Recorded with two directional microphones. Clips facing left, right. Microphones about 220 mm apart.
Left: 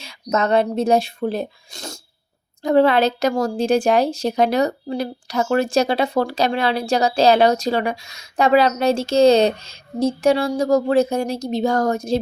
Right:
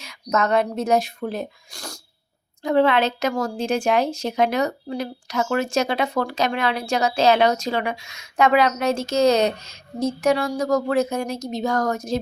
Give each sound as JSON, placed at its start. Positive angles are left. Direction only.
{"t": 0.0, "sound": "speech", "side_deg": 30}
{"t": 2.6, "sound": "a woman's voice", "side_deg": 35}